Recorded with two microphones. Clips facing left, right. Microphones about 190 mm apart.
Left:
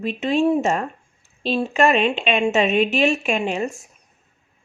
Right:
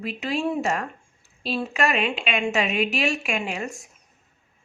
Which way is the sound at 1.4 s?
30° left (ahead or behind).